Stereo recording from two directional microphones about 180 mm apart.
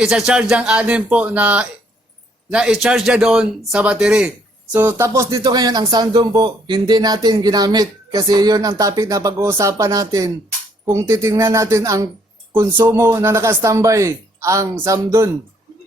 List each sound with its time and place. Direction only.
0.0 s a man's voice: 5° right (ahead or behind)